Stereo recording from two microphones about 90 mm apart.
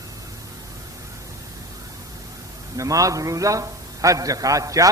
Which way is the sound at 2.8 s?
40° right (ahead or behind).